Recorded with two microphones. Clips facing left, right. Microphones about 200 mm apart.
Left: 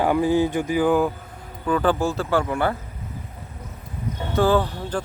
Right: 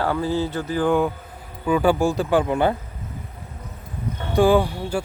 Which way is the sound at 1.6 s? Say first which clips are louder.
Right 2 dB; 10° right (ahead or behind).